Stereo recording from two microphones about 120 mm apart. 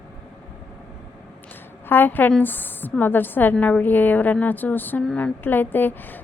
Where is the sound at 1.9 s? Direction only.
15° left (ahead or behind).